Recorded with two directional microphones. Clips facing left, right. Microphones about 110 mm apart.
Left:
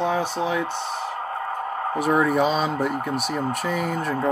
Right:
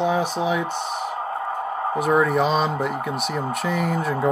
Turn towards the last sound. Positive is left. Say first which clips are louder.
# right 2 dB
turn(degrees=0)  # may be behind; listen again after turning